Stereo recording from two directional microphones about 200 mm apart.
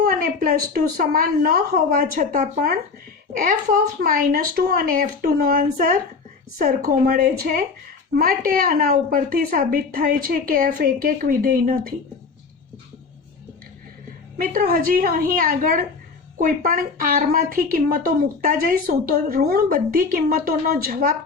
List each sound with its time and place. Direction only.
0.0 s speech: 45° right (ahead or behind)
14.3 s speech: 45° right (ahead or behind)